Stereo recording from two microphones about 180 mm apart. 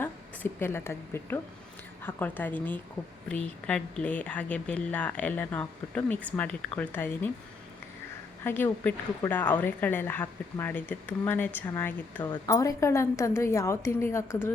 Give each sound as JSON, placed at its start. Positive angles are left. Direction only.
{"t": 0.6, "sound": "a woman's voice", "side_deg": 15}
{"t": 8.4, "sound": "a woman's voice", "side_deg": 10}